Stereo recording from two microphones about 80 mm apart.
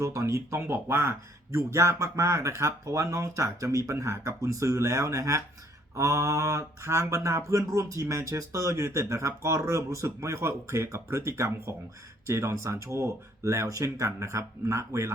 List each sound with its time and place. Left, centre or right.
0.0 s speech: right